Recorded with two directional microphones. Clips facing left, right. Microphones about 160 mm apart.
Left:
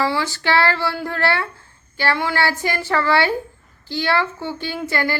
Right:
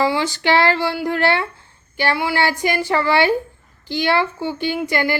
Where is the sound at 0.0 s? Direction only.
15° right (ahead or behind).